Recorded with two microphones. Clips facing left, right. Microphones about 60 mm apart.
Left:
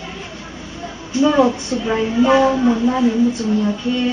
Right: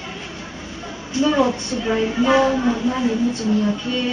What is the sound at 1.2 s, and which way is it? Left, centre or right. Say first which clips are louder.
Speech: left 4 dB; centre.